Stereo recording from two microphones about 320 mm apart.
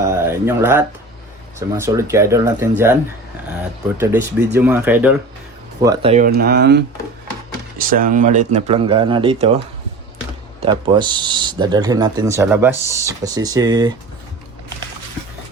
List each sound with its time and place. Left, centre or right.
0.1 s a sound: centre
1.5 s speech: centre
4.0 s speech: centre
10.6 s speech: centre